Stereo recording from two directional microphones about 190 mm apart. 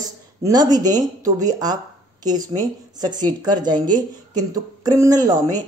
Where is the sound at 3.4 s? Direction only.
20° right (ahead or behind).